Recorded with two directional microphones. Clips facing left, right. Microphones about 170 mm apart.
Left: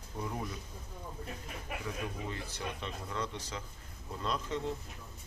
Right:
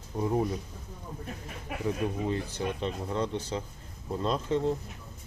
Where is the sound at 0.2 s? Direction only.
30° right (ahead or behind).